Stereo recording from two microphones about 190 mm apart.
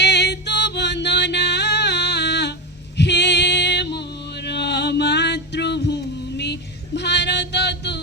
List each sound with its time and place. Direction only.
0.0 s music: 65° left (ahead or behind)
3.0 s female singing: 65° left (ahead or behind)